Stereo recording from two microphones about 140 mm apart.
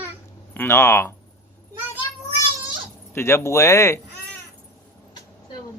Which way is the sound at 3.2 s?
20° left (ahead or behind).